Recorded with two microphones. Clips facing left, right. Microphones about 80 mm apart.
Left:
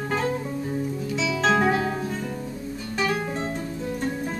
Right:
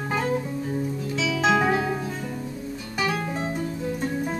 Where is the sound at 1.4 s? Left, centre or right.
Centre.